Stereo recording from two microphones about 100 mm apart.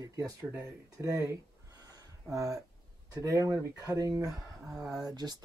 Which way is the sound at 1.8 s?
40° right (ahead or behind).